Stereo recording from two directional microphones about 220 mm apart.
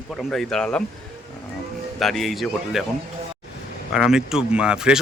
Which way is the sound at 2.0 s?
Centre (ahead or behind).